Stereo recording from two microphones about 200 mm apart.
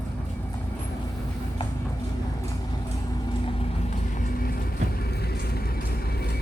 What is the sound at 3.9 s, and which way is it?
Vehicle, 40° left (ahead or behind).